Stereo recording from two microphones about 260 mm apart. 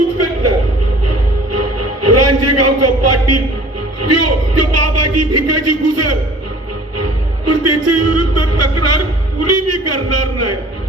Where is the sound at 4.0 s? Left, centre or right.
Right.